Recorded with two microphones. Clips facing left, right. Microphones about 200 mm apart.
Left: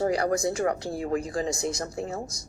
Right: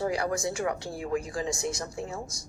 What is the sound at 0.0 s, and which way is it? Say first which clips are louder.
Speech: left 4 dB; 40° left (ahead or behind).